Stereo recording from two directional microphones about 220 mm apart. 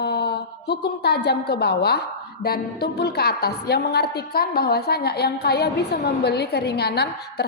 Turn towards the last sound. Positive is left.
turn(degrees=45)  # may be behind; listen again after turning